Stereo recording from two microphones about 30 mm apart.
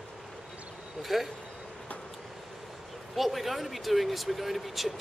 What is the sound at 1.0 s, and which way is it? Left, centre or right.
Speech, centre.